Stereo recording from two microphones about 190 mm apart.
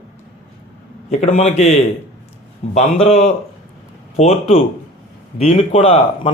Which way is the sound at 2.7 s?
35° left (ahead or behind).